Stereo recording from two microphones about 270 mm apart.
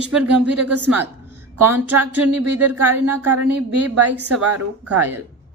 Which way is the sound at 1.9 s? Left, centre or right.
Centre.